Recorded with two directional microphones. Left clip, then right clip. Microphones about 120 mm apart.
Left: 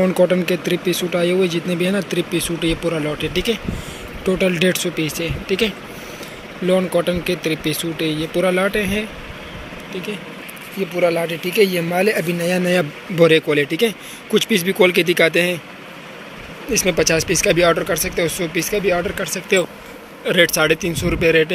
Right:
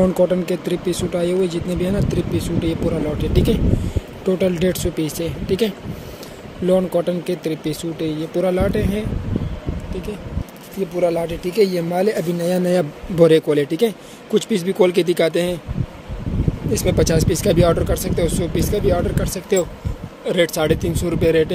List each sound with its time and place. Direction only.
0.2 s speech: 15° right (ahead or behind)
4.9 s speech: 35° right (ahead or behind)
7.0 s speech: 20° right (ahead or behind)
10.8 s speech: 15° right (ahead or behind); by 13.9 s 35° right (ahead or behind)
14.3 s speech: 20° right (ahead or behind)
16.7 s speech: 25° right (ahead or behind)
20.2 s speech: 20° right (ahead or behind)